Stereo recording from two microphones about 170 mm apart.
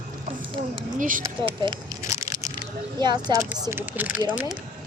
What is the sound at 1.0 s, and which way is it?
Speech, 50° right (ahead or behind).